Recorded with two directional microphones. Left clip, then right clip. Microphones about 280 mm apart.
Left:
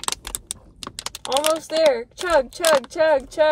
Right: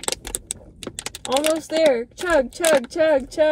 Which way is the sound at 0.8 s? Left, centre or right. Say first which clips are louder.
Right 1 dB; centre.